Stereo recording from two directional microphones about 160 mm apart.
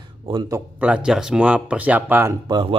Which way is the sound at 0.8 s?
5° right (ahead or behind).